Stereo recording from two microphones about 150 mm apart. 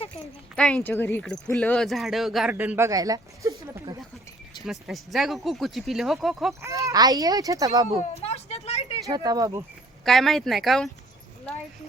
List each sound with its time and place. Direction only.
0.5 s speech: 5° left (ahead or behind)
2.6 s a child's voice: 15° right (ahead or behind)
4.6 s speech: centre (ahead or behind)
6.6 s a child's voice: 20° right (ahead or behind)
8.1 s a sound: 45° left (ahead or behind)
9.0 s a child's voice: 25° right (ahead or behind)
10.0 s speech: centre (ahead or behind)